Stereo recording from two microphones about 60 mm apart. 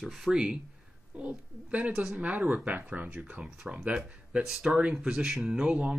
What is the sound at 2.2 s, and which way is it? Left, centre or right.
Speech, right.